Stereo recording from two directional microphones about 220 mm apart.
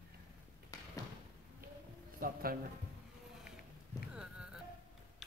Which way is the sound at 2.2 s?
40° right (ahead or behind).